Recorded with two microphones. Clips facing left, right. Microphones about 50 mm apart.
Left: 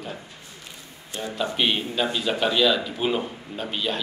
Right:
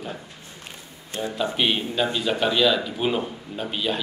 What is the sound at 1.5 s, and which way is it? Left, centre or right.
Speech, centre.